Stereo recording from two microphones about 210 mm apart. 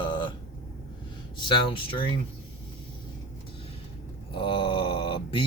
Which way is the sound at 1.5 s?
25° left (ahead or behind).